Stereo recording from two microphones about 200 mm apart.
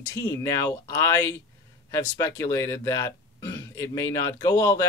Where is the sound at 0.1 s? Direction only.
15° left (ahead or behind).